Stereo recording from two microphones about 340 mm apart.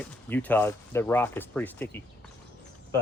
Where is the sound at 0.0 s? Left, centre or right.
Centre.